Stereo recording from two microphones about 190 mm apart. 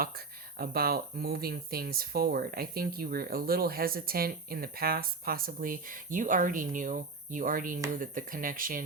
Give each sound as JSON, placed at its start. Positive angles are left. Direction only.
{"t": 0.6, "sound": "speech", "side_deg": -50}